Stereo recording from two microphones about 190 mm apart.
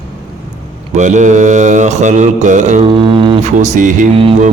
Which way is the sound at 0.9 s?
40° right (ahead or behind).